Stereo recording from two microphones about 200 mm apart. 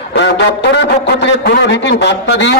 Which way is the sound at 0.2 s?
60° left (ahead or behind).